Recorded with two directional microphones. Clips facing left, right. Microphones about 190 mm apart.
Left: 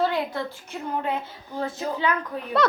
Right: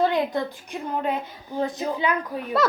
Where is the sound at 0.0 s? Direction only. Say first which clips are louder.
Right 3 dB; 20° right (ahead or behind).